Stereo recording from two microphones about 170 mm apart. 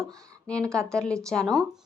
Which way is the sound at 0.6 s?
15° right (ahead or behind).